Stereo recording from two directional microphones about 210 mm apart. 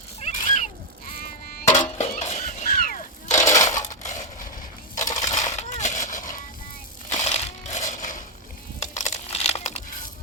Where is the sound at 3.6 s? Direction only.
35° left (ahead or behind).